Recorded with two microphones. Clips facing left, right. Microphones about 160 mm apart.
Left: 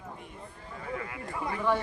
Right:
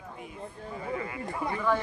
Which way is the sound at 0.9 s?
Centre (ahead or behind).